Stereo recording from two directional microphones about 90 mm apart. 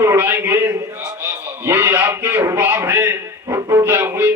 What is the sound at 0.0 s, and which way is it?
A man's voice, 25° right (ahead or behind).